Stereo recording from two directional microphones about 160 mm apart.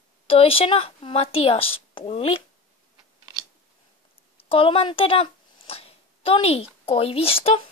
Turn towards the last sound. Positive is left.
turn(degrees=35)  # may be behind; listen again after turning